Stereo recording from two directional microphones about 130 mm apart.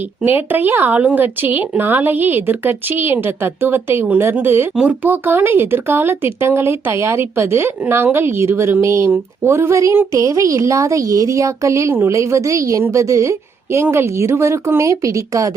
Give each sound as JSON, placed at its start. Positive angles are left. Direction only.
{"t": 0.3, "sound": "speech", "side_deg": -15}